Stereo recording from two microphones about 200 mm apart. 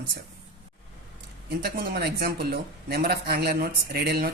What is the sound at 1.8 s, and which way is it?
Speech, 50° right (ahead or behind).